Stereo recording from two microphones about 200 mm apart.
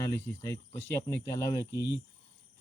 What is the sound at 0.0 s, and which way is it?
Speech, 15° left (ahead or behind).